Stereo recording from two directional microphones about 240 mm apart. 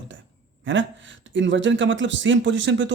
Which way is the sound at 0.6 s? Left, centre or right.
Right.